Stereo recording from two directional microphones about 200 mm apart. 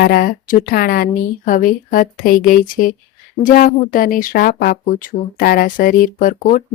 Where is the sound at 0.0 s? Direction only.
45° left (ahead or behind).